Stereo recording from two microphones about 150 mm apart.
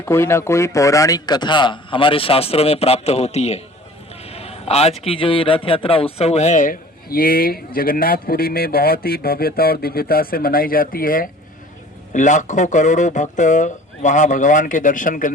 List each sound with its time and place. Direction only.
0.0 s a man's voice: 15° left (ahead or behind); by 11.3 s 70° left (ahead or behind)
12.1 s speech: 55° left (ahead or behind)